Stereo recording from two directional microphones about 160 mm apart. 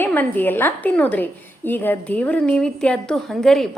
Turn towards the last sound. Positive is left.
turn(degrees=0)  # may be behind; listen again after turning